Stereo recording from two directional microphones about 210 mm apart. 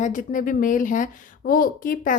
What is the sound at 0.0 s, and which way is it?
A woman's voice, 35° left (ahead or behind).